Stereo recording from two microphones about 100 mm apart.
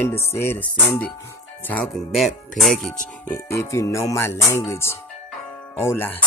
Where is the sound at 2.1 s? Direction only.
Centre (ahead or behind).